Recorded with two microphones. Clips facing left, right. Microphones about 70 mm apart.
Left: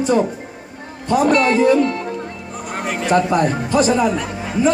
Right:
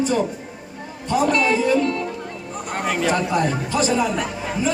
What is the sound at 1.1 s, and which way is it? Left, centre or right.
Speech, left.